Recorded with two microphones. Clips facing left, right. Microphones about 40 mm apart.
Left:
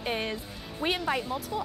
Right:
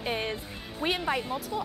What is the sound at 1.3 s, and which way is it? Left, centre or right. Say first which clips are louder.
Speech: even; right.